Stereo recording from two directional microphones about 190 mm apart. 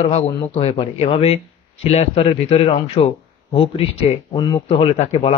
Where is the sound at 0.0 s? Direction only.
30° left (ahead or behind).